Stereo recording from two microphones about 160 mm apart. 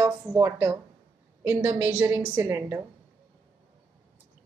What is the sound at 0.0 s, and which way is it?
A woman's voice, 15° right (ahead or behind).